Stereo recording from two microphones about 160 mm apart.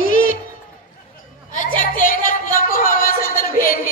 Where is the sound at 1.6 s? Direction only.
55° left (ahead or behind).